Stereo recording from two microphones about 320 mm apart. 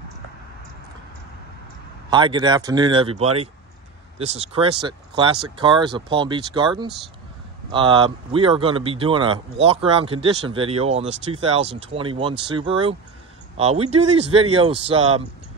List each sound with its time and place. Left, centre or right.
2.0 s speech: centre
7.7 s speech: centre